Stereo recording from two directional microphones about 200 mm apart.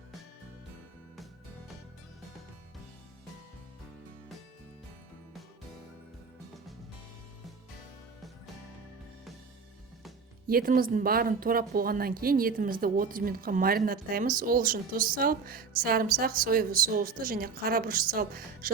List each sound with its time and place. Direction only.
10.4 s a woman's voice: 45° right (ahead or behind)